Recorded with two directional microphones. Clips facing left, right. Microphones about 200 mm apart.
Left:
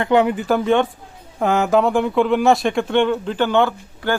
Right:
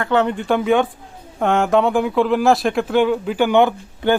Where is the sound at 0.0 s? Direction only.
15° left (ahead or behind).